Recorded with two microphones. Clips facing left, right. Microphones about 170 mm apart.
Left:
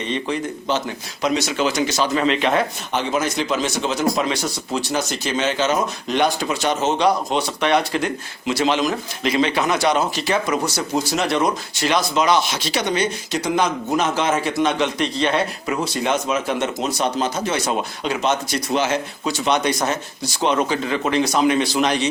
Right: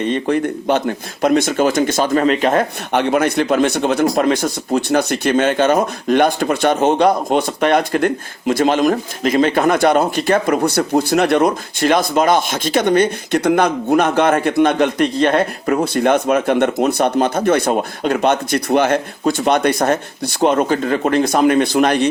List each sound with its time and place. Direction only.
0.0 s speech: 50° right (ahead or behind)